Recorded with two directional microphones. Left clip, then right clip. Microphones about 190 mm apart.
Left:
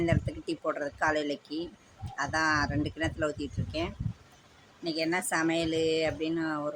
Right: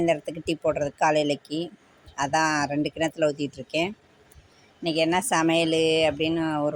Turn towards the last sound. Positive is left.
turn(degrees=-25)  # may be behind; listen again after turning